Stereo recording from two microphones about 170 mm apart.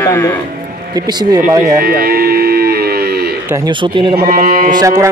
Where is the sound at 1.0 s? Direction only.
25° right (ahead or behind).